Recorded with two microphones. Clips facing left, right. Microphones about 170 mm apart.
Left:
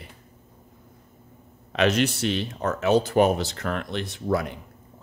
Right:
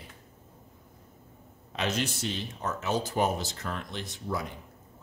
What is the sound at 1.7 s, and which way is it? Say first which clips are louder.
Speech: left 9 dB; 70° left (ahead or behind).